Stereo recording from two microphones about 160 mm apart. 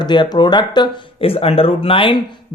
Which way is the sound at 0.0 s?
30° left (ahead or behind).